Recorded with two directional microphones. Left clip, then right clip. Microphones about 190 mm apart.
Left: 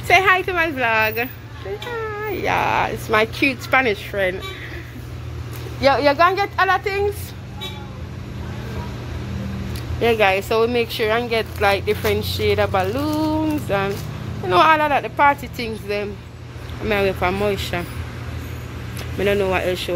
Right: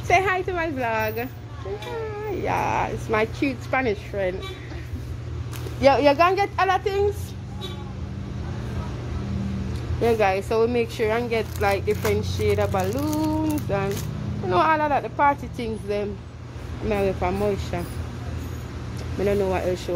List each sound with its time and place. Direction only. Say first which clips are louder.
0.1 s speech: left 6 dB; centre (ahead or behind)
5.8 s a child's voice: left 2 dB; 20° right (ahead or behind)
10.0 s speech: left 4 dB; centre (ahead or behind)
16.8 s speech: left 4 dB; centre (ahead or behind)
19.1 s speech: left 4 dB; centre (ahead or behind)